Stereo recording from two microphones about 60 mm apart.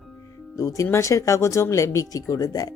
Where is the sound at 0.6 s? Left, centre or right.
Left.